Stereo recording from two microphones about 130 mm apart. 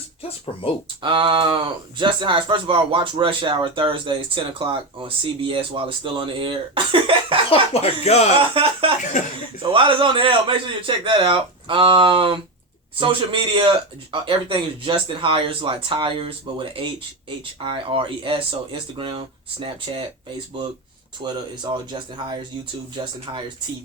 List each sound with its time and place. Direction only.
0.2 s speech: 50° left (ahead or behind)
1.0 s speech: 40° right (ahead or behind)
7.5 s speech: 55° left (ahead or behind)
8.6 s speech: 45° right (ahead or behind)
9.2 s speech: 75° left (ahead or behind)
9.6 s speech: 40° right (ahead or behind)
21.2 s speech: 35° right (ahead or behind)